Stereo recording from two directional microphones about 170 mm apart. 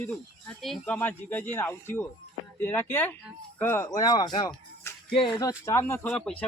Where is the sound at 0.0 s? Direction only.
5° left (ahead or behind); by 4.5 s 25° left (ahead or behind).